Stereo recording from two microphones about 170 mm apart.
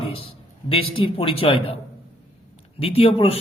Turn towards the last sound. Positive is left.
turn(degrees=35)  # may be behind; listen again after turning